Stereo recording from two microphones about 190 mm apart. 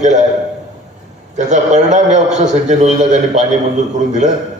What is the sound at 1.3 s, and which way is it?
A man's voice, 40° right (ahead or behind).